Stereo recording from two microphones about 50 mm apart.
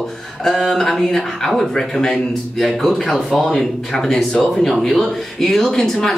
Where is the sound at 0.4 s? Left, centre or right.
Centre.